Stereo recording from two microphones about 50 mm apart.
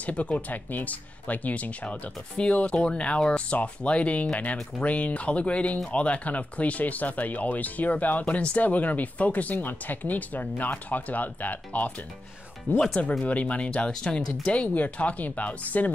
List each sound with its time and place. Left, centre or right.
0.0 s speech: left
13.2 s speech: left